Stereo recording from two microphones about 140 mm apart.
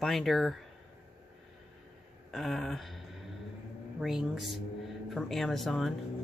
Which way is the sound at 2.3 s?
Centre (ahead or behind).